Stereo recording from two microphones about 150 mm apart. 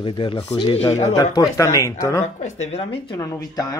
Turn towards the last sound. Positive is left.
turn(degrees=25)  # may be behind; listen again after turning